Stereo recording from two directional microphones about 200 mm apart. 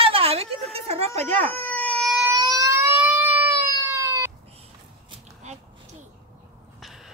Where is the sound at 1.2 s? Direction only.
10° left (ahead or behind).